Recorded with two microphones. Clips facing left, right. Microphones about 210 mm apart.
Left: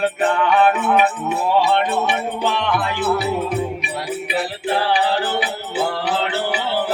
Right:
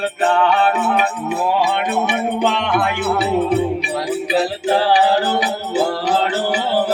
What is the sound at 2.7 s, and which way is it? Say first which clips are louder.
Music: right 1 dB; 55° right (ahead or behind).